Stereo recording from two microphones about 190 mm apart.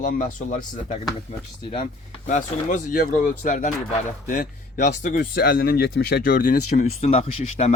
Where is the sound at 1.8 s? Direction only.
45° left (ahead or behind).